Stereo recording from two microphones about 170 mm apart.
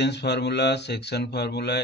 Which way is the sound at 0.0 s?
80° left.